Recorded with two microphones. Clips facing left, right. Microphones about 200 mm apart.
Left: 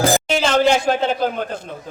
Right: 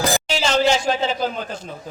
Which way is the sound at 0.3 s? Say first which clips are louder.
Left 3 dB; 55° left (ahead or behind).